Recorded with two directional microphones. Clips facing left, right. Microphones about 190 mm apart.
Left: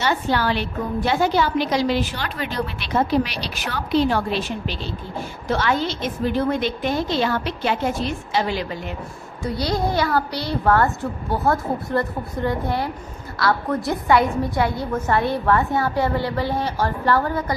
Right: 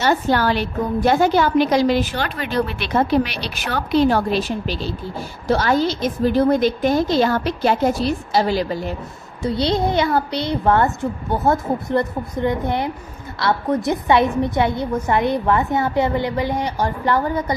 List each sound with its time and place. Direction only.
0.0 s a woman's voice: 45° right (ahead or behind)
9.4 s a woman's voice: 25° right (ahead or behind)